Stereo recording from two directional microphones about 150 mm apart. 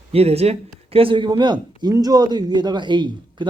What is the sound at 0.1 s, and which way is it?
Speech, 45° right (ahead or behind).